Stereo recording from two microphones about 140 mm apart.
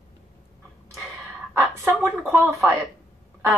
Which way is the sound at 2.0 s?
20° right (ahead or behind).